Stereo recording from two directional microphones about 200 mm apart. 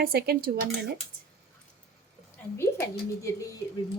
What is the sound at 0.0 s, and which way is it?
Speech, 50° right (ahead or behind).